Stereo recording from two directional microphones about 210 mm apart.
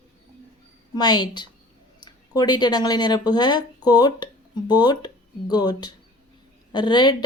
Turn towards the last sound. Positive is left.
turn(degrees=20)  # may be behind; listen again after turning